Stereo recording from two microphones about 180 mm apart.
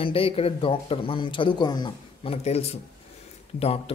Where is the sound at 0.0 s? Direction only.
30° left (ahead or behind).